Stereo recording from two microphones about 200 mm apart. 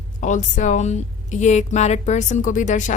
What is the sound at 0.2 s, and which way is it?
Speech, 35° left (ahead or behind).